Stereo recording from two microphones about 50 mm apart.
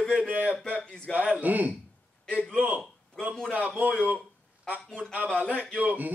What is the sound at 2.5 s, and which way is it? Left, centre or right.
Speech, right.